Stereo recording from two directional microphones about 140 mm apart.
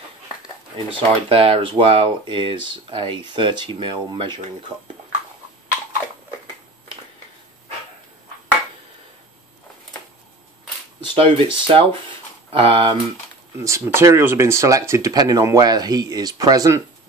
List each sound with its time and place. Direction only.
0.8 s speech: 40° right (ahead or behind)
11.1 s speech: 40° right (ahead or behind)
13.7 s speech: 20° right (ahead or behind)